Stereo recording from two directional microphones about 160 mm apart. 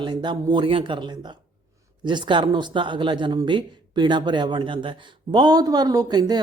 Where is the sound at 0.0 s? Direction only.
30° right (ahead or behind).